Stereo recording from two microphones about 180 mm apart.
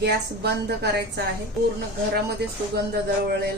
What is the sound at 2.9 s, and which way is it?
Speech, 65° right (ahead or behind).